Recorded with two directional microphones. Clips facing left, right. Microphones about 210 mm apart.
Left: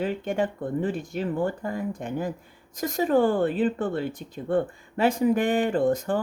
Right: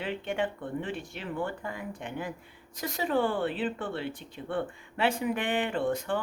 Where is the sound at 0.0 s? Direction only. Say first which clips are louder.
Left 5 dB; 40° left (ahead or behind).